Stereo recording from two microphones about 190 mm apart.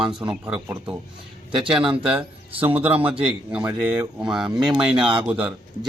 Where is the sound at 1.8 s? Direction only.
30° right (ahead or behind).